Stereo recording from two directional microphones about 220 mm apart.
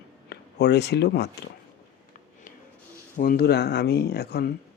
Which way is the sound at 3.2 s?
45° left (ahead or behind).